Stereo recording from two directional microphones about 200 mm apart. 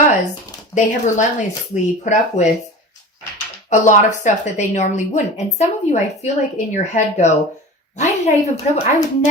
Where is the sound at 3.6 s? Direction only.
35° left (ahead or behind).